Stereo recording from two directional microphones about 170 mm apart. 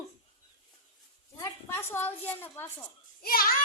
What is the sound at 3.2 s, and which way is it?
Speech, 60° left (ahead or behind).